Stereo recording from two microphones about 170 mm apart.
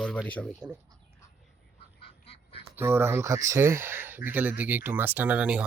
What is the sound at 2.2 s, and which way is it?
Duck, 35° left (ahead or behind).